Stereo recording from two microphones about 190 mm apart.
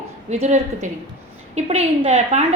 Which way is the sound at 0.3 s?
35° right (ahead or behind).